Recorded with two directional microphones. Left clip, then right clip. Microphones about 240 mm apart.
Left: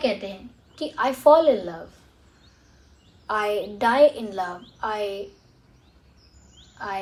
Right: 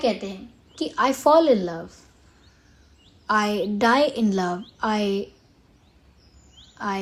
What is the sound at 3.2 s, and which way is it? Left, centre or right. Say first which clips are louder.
Speech: right 2 dB; right.